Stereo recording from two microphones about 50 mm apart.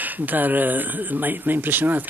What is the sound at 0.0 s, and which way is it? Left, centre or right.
A man's voice, right.